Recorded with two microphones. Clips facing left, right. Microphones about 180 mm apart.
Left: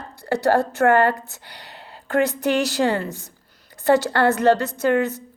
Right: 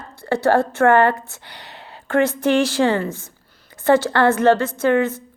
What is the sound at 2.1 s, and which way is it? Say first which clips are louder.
Speech: right 3 dB; 40° left (ahead or behind).